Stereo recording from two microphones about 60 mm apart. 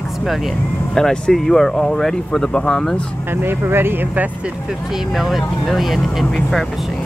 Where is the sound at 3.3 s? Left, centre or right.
Right.